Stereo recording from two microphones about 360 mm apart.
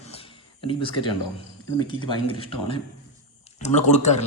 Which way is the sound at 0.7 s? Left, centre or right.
Centre.